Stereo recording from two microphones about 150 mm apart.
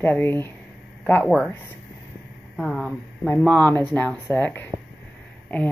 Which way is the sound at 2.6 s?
Centre (ahead or behind).